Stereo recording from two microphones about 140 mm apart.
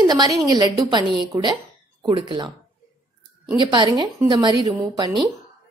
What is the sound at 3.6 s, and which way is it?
A woman's voice, 35° right (ahead or behind).